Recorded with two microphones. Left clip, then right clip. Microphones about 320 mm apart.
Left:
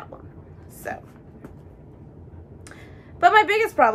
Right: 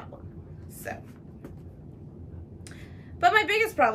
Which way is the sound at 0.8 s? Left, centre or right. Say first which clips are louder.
Left 5 dB; centre.